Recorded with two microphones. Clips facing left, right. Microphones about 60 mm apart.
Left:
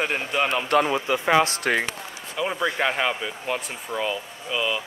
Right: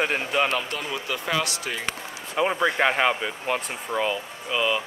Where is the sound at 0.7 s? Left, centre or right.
Left.